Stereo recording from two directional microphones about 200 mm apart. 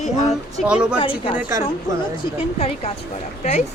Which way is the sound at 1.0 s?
25° left (ahead or behind).